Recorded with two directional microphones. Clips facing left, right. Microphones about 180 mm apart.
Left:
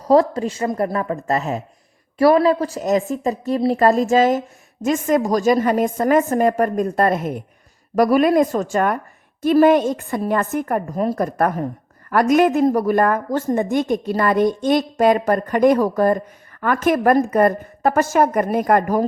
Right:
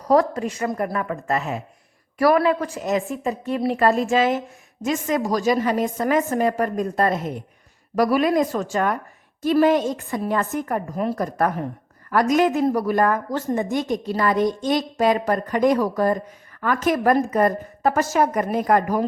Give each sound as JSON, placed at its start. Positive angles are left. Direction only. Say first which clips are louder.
{"t": 0.0, "sound": "a woman's voice", "louder": "left 3 dB", "side_deg": 30}
{"t": 2.1, "sound": "a woman's voice", "louder": "left 4 dB", "side_deg": 25}
{"t": 10.9, "sound": "a woman's voice", "louder": "left 3 dB", "side_deg": 40}
{"t": 11.2, "sound": "a woman's voice", "louder": "left 3 dB", "side_deg": 55}